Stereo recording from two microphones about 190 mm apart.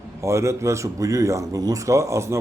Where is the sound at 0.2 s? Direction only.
15° right (ahead or behind).